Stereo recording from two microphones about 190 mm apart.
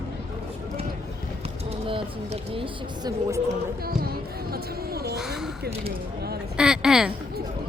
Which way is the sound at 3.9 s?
55° right (ahead or behind).